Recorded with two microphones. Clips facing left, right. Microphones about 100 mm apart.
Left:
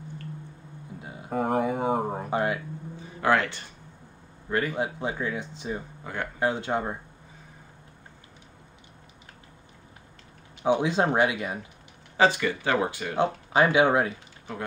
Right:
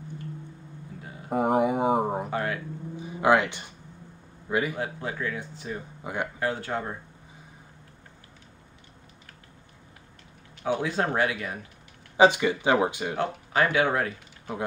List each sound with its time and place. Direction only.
1.0 s a sound: 20° left (ahead or behind)
1.3 s a sound: 15° right (ahead or behind)
2.2 s speech: 20° left (ahead or behind)
3.0 s speech: 15° right (ahead or behind)
4.7 s speech: 20° left (ahead or behind)
6.1 s speech: 15° right (ahead or behind)
6.4 s speech: 20° left (ahead or behind)
10.6 s speech: 20° left (ahead or behind)
12.2 s speech: 15° right (ahead or behind)
13.1 s speech: 20° left (ahead or behind)